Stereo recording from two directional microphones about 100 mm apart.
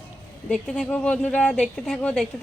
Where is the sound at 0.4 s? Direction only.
5° left (ahead or behind).